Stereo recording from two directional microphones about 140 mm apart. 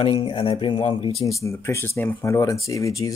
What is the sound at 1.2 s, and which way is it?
Speech, 20° left (ahead or behind).